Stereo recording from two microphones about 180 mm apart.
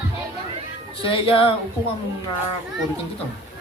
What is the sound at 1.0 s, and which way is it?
Speech, 30° left (ahead or behind).